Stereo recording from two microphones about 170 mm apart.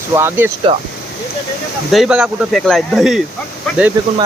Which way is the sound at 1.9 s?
5° right (ahead or behind).